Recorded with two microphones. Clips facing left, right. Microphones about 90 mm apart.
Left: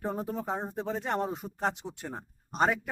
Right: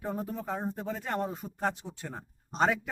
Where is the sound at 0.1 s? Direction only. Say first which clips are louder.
Right 1 dB; 20° left (ahead or behind).